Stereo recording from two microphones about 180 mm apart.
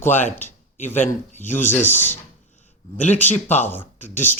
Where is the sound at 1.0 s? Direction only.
40° left (ahead or behind).